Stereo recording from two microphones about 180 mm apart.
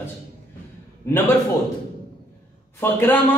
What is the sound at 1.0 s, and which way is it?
Speech, 15° left (ahead or behind).